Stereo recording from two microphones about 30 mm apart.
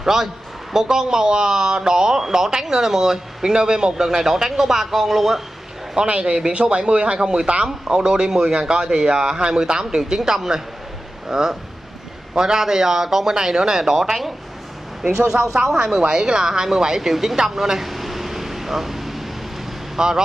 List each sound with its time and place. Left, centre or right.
0.0 s a man's voice: centre
3.5 s speech: right; by 5.4 s centre
6.2 s speech: right
6.5 s speech: right; by 13.3 s centre
13.3 s speech: right
15.6 s speech: centre
17.7 s a sound: centre
20.0 s speech: right